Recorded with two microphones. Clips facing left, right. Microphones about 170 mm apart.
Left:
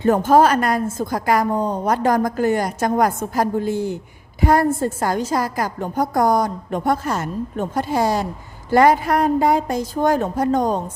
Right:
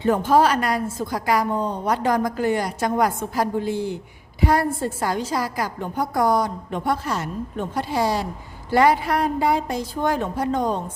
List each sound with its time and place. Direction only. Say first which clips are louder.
0.0 s a woman's voice: left 3 dB; 45° left (ahead or behind)